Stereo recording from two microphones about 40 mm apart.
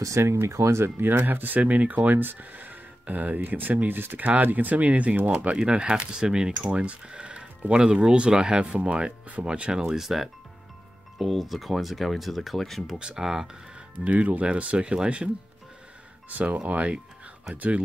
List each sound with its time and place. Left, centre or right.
0.2 s speech: right
1.1 s speech: right
5.6 s speech: right
6.7 s speech: right
9.8 s speech: centre
12.9 s speech: centre
13.9 s speech: right
16.3 s speech: right